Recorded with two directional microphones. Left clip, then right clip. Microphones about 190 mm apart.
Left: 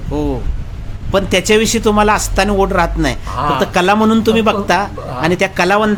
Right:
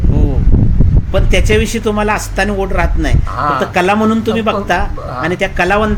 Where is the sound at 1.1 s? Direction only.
20° left (ahead or behind).